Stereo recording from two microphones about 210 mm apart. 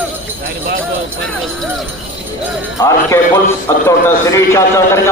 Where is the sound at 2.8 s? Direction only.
15° left (ahead or behind).